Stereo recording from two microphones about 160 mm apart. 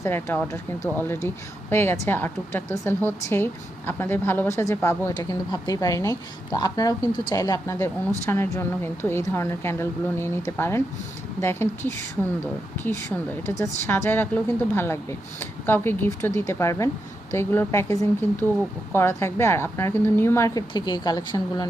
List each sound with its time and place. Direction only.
0.0 s a woman's voice: 15° left (ahead or behind)